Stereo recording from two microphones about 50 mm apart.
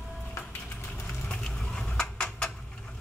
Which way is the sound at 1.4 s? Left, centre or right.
Centre.